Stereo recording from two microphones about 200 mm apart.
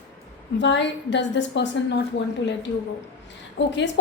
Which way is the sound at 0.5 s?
65° left (ahead or behind).